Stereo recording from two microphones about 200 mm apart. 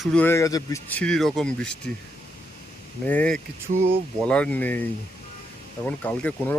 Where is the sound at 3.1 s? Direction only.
5° left (ahead or behind).